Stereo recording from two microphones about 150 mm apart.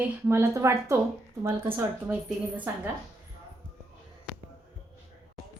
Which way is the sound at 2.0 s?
10° right (ahead or behind).